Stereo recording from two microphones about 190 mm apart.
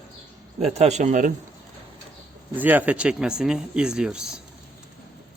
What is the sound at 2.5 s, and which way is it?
Speech, 10° right (ahead or behind).